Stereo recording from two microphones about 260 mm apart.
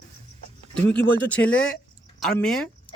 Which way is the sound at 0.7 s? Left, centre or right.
Centre.